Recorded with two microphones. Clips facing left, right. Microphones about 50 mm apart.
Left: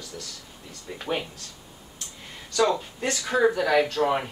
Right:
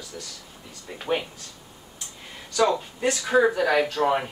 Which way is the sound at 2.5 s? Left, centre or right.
Centre.